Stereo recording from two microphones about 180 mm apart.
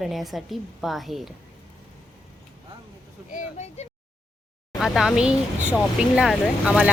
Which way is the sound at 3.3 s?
40° left (ahead or behind).